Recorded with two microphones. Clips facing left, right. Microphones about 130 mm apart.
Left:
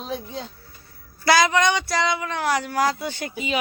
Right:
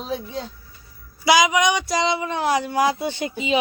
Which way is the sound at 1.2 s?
10° right (ahead or behind).